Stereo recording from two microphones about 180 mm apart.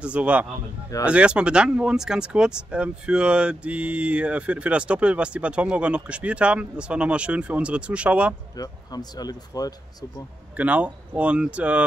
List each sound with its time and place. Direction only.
0.0 s speech: 5° right (ahead or behind)
8.5 s speech: 20° left (ahead or behind)
10.5 s speech: 10° right (ahead or behind)